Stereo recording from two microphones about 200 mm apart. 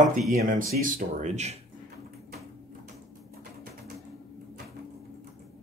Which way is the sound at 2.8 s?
50° right (ahead or behind).